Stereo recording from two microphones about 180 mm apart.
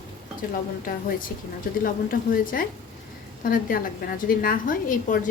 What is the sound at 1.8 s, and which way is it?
A woman's voice, 50° left (ahead or behind).